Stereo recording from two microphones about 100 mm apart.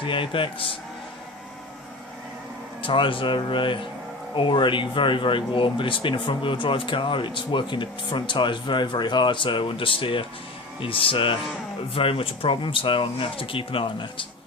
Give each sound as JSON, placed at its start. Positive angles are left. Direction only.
{"t": 0.0, "sound": "speech", "side_deg": 60}
{"t": 2.8, "sound": "speech", "side_deg": 60}